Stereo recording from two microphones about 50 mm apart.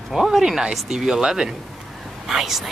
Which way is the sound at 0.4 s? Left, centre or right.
Centre.